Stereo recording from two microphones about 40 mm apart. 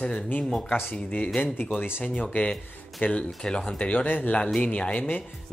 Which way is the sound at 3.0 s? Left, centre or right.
Left.